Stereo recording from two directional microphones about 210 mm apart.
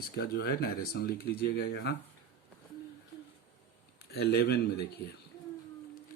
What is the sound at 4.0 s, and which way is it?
Speech, 50° left (ahead or behind).